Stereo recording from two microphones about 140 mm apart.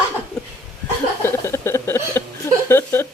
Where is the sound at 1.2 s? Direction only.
20° left (ahead or behind).